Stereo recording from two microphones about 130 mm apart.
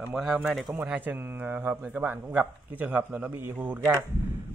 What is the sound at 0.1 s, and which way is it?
Speech, centre (ahead or behind).